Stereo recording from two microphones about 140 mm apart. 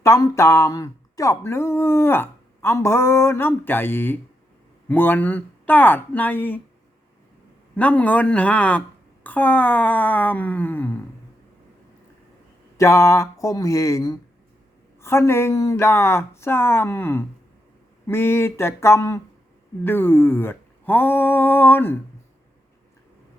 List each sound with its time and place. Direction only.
0.0 s speech: 20° left (ahead or behind)
7.8 s speech: 10° left (ahead or behind)
12.7 s speech: 20° left (ahead or behind)